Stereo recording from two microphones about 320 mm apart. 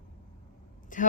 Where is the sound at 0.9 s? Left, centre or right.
Left.